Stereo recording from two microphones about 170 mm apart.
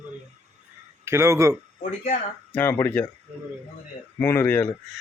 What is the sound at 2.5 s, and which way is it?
Speech, 15° left (ahead or behind).